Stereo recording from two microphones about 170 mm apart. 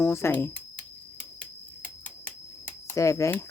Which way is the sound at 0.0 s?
15° left (ahead or behind).